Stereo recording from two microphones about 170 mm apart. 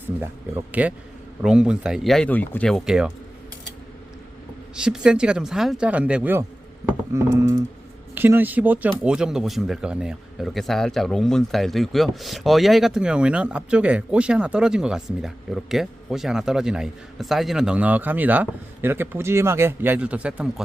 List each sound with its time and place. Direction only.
0.2 s speech: 10° right (ahead or behind)
4.7 s speech: 5° right (ahead or behind)